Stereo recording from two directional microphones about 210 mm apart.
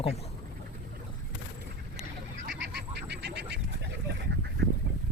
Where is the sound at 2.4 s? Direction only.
55° right (ahead or behind).